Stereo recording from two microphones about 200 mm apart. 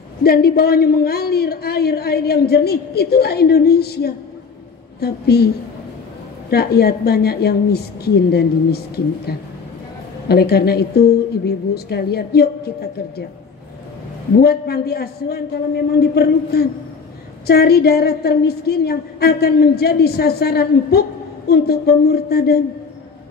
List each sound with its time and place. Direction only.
0.2 s a man's voice: 50° left (ahead or behind)
6.5 s a man's voice: 50° left (ahead or behind)
14.4 s a man's voice: 50° left (ahead or behind)